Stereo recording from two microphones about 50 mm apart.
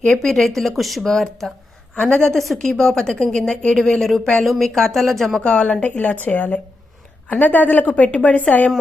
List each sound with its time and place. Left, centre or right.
0.1 s speech: centre
2.0 s a woman's voice: left
2.3 s speech: centre
4.0 s speech: centre
5.4 s a woman's voice: left
5.8 s a woman's voice: left